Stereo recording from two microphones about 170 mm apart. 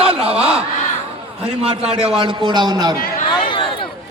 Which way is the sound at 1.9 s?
35° right (ahead or behind).